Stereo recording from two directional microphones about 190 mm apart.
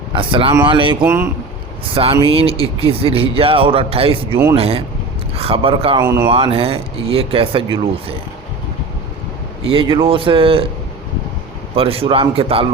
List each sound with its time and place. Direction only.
0.1 s speech: 25° right (ahead or behind)
1.0 s speech: 10° right (ahead or behind)
2.2 s speech: 30° right (ahead or behind)
6.0 s speech: 15° right (ahead or behind)
6.2 s speech: 30° right (ahead or behind)
9.6 s speech: 25° right (ahead or behind)
11.7 s speech: 30° right (ahead or behind)